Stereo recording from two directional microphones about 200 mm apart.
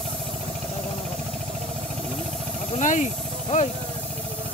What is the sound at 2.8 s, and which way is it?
Snake, 40° left (ahead or behind).